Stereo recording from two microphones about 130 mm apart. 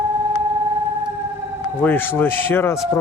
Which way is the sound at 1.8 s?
15° left (ahead or behind).